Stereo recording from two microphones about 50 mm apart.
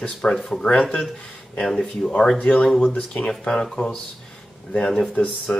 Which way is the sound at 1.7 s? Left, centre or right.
Centre.